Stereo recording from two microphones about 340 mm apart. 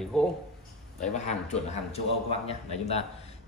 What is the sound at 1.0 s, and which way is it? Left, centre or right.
A man's voice, left.